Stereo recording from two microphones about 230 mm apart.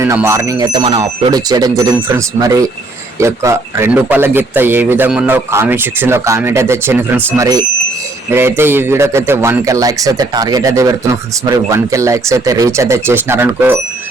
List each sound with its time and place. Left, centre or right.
0.0 s speech: centre